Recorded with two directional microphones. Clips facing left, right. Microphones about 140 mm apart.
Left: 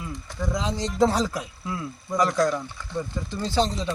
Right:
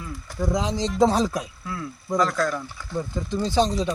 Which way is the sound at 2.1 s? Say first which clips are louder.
Left 1 dB; 15° left (ahead or behind).